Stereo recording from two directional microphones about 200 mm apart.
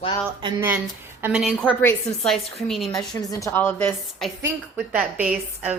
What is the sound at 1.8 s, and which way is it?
A woman's voice, 5° left (ahead or behind).